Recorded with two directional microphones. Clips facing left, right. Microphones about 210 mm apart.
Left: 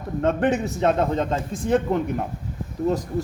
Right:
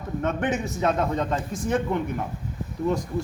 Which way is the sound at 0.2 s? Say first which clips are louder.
Left 5 dB; 35° left (ahead or behind).